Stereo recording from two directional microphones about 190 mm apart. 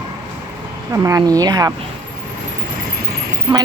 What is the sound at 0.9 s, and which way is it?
Speech, 15° right (ahead or behind).